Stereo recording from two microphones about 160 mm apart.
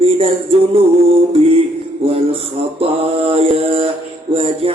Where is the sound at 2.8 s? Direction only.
35° right (ahead or behind).